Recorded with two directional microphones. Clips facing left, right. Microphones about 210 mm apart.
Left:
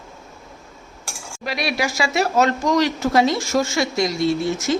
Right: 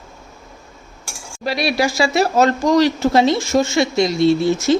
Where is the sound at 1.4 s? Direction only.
30° right (ahead or behind).